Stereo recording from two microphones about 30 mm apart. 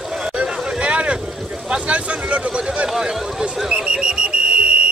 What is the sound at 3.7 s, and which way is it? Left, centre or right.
Alarm clock, right.